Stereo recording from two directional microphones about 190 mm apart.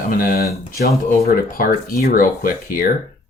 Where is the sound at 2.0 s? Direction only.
45° left (ahead or behind).